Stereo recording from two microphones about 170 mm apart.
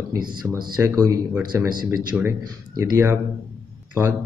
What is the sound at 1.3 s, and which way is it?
Speech, 5° right (ahead or behind).